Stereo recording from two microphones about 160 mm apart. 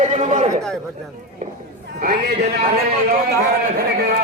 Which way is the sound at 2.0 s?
80° right.